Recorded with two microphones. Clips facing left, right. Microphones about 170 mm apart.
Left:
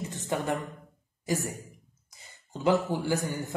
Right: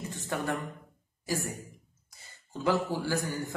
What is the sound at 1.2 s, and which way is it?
A man's voice, 20° left (ahead or behind).